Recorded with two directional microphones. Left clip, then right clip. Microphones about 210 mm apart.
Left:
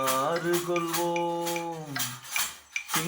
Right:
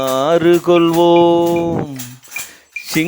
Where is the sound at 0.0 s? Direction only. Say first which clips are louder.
Right 14 dB; 75° right (ahead or behind); by 1.5 s 60° right (ahead or behind).